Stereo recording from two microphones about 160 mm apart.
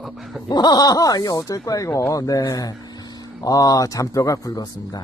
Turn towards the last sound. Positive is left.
turn(degrees=25)  # may be behind; listen again after turning